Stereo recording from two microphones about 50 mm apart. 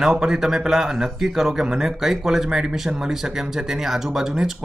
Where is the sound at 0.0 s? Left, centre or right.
Centre.